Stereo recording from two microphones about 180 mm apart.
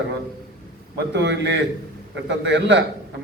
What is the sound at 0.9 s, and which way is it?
A man's voice, 75° right (ahead or behind).